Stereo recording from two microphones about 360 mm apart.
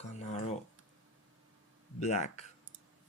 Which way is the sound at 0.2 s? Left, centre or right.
Centre.